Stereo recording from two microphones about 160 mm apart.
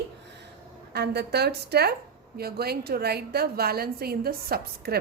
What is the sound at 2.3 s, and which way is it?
A woman's voice, 80° right.